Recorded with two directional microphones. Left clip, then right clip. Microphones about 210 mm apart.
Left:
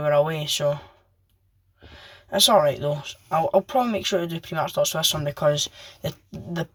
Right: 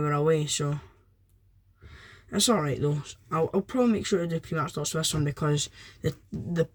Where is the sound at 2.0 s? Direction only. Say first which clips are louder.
Left 7 dB; 15° right (ahead or behind).